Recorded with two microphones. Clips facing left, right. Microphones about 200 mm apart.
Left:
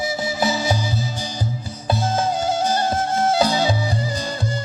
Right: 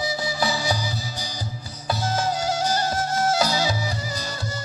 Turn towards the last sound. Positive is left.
turn(degrees=30)  # may be behind; listen again after turning